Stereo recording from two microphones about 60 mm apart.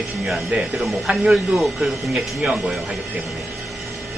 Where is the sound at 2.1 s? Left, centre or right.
Centre.